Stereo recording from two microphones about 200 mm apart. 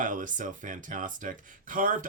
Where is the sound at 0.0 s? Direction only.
40° right (ahead or behind).